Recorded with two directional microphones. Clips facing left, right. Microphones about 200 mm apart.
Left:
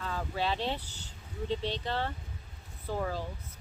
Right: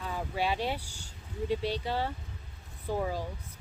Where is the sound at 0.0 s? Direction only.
15° right (ahead or behind).